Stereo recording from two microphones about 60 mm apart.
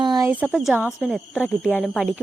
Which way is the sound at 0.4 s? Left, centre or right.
Centre.